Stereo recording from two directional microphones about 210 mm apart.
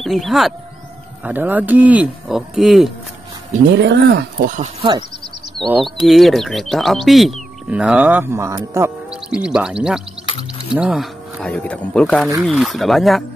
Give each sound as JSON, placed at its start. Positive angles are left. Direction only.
{"t": 0.0, "sound": "speech", "side_deg": 0}
{"t": 3.7, "sound": "speech", "side_deg": -55}
{"t": 5.6, "sound": "speech", "side_deg": 0}